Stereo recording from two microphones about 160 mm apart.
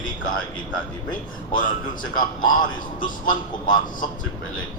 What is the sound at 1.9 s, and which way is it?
Speech, 60° left (ahead or behind).